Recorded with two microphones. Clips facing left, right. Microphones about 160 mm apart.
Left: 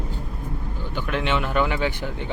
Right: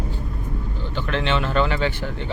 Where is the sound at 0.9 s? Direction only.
15° left (ahead or behind).